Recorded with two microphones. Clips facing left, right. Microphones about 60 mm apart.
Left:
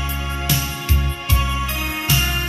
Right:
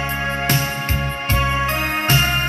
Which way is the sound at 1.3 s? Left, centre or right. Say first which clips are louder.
Right 4 dB; right.